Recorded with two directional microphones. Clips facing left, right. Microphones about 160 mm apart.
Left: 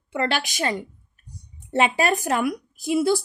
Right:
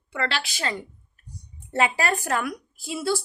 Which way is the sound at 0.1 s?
20° left (ahead or behind).